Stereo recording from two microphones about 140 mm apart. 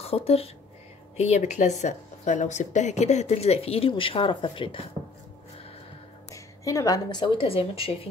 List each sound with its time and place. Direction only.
0.0 s speech: 45° left (ahead or behind)
6.3 s a woman's voice: 25° left (ahead or behind); by 8.1 s 40° left (ahead or behind)